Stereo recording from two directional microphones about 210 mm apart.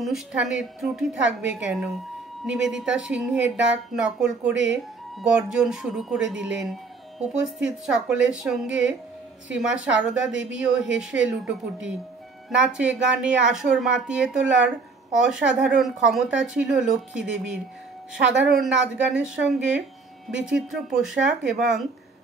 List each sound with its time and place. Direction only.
0.0 s speech: centre (ahead or behind)
18.6 s speech: 5° right (ahead or behind)